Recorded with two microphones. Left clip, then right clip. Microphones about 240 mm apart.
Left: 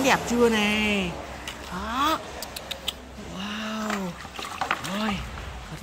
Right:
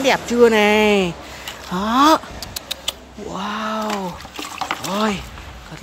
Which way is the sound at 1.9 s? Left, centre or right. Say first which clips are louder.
Right 11 dB; centre.